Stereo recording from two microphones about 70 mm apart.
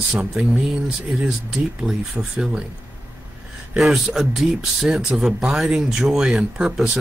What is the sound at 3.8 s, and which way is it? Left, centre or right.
Speech, centre.